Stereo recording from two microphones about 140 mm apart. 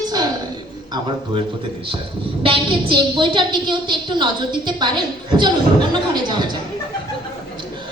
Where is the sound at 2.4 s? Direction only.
35° right (ahead or behind).